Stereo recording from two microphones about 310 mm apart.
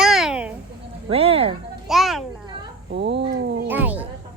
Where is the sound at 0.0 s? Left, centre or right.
Centre.